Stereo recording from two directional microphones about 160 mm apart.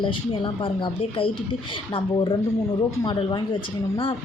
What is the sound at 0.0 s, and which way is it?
Speech, 30° left (ahead or behind).